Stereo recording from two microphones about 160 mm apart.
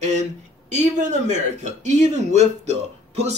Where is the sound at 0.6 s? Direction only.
50° right (ahead or behind).